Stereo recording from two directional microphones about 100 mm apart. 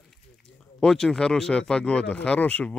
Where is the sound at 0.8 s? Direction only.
5° left (ahead or behind).